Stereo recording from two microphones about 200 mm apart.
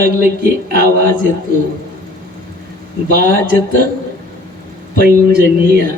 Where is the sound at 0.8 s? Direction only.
50° right (ahead or behind).